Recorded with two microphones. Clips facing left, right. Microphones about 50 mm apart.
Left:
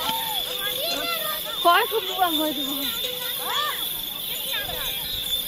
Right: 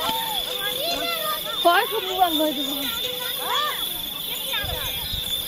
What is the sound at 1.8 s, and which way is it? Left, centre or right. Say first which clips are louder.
Speech: left 1 dB; centre.